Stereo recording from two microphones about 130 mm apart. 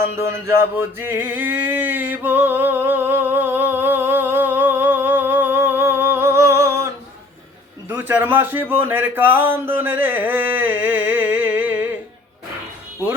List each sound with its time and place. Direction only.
0.0 s music: 20° right (ahead or behind)
7.9 s a man's voice: 15° right (ahead or behind)